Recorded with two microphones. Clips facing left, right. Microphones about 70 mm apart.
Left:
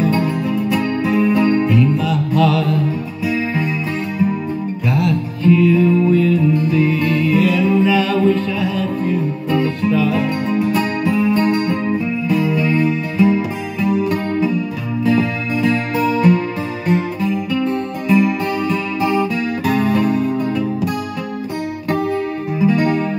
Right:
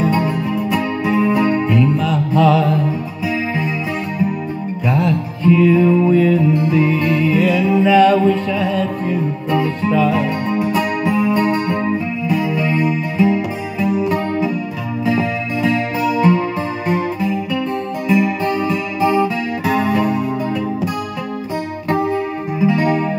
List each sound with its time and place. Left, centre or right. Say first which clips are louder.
0.7 s music: even; centre
5.4 s music: right 1 dB; centre
18.0 s music: left 1 dB; centre
19.6 s music: even; centre
21.8 s music: right 1 dB; centre